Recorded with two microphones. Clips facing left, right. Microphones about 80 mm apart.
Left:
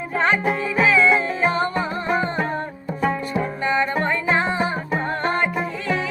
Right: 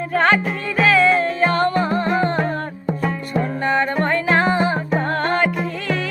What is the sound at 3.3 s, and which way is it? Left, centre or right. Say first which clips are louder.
Music: right 2 dB; right.